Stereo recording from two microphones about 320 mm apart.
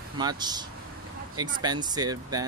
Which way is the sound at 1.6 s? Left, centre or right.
Centre.